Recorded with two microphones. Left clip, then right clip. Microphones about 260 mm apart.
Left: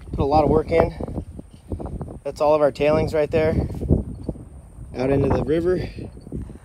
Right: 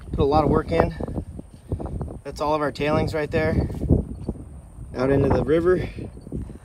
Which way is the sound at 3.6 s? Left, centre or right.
Centre.